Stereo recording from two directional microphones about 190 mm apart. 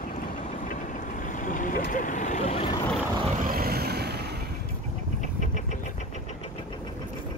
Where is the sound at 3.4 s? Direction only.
50° right (ahead or behind).